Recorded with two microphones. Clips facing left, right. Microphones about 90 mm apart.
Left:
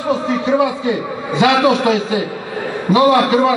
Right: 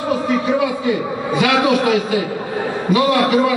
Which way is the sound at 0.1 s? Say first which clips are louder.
Left 2 dB; 25° left (ahead or behind).